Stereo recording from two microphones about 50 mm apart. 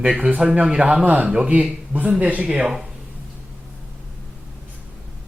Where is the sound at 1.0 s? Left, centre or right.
Right.